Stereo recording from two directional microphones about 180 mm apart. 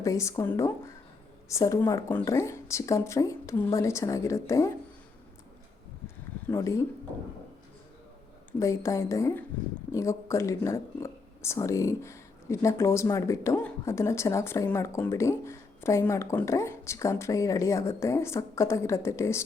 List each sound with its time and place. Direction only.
0.0 s speech: 15° left (ahead or behind)
6.5 s speech: 20° left (ahead or behind)
8.5 s speech: 15° left (ahead or behind)